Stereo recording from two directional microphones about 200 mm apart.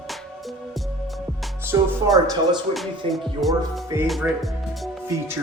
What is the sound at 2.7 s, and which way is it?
Music, centre (ahead or behind).